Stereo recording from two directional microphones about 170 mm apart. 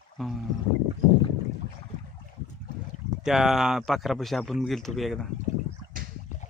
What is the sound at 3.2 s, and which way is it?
Speech, centre (ahead or behind).